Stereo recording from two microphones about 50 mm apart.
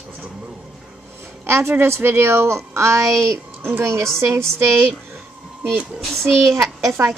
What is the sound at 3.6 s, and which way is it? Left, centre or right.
Speech, right.